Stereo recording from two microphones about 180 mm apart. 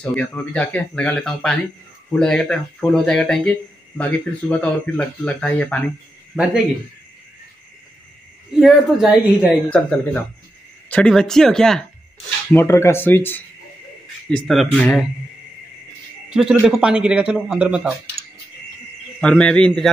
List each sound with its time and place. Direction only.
0.0 s a man's voice: 5° left (ahead or behind)
6.3 s a man's voice: 5° right (ahead or behind)
8.5 s a man's voice: centre (ahead or behind)
9.7 s a man's voice: 10° left (ahead or behind)
12.5 s speech: 15° left (ahead or behind)
14.3 s a man's voice: centre (ahead or behind)
16.3 s a man's voice: 5° right (ahead or behind)
18.2 s a sound: 60° left (ahead or behind)
19.2 s a man's voice: 5° left (ahead or behind)